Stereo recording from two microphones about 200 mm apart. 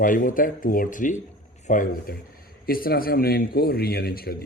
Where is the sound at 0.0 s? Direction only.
45° left (ahead or behind).